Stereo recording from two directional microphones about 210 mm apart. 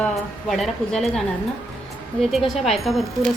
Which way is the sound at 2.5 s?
Centre (ahead or behind).